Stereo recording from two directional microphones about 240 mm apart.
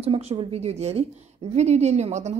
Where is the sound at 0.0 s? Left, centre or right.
Right.